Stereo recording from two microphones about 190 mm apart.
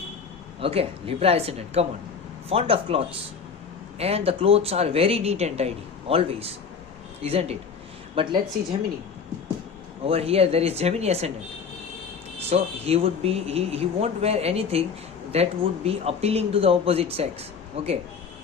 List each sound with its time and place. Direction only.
0.6 s speech: 30° right (ahead or behind)
10.1 s speech: 30° right (ahead or behind)
12.5 s speech: 35° right (ahead or behind)